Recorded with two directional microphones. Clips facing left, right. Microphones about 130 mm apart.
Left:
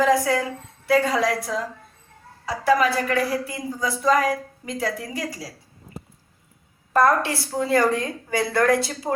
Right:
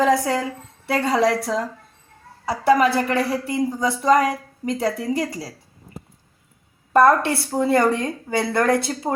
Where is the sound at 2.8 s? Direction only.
30° right (ahead or behind).